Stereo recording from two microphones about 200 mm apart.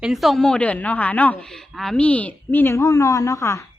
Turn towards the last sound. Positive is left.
turn(degrees=15)  # may be behind; listen again after turning